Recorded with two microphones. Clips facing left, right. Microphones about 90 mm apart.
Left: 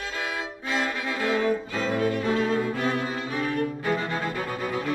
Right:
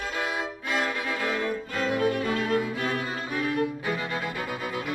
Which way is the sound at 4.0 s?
30° left (ahead or behind).